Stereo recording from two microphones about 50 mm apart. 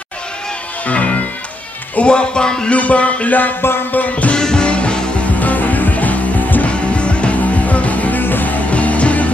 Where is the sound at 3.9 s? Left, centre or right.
Left.